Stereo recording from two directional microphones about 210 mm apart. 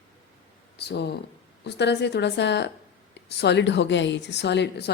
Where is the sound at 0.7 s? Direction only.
50° left (ahead or behind).